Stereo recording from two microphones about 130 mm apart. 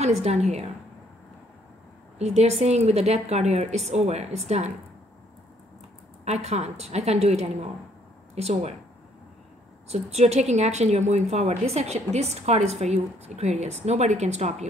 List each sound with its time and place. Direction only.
0.0 s a woman's voice: 55° right (ahead or behind)
2.1 s a woman's voice: 55° right (ahead or behind)
6.3 s a woman's voice: 55° right (ahead or behind)
9.8 s a woman's voice: 60° right (ahead or behind)